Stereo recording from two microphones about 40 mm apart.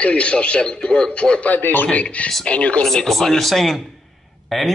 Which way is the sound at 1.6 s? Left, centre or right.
Left.